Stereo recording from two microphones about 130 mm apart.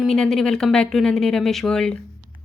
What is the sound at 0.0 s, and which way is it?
A woman's voice, 5° left (ahead or behind).